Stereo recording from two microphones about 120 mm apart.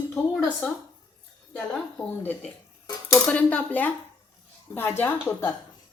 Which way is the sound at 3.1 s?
15° left (ahead or behind).